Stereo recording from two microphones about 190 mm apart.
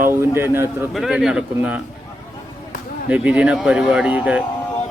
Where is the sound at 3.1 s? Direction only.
5° right (ahead or behind).